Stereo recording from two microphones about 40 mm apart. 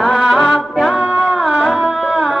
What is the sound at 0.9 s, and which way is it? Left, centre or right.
Music, right.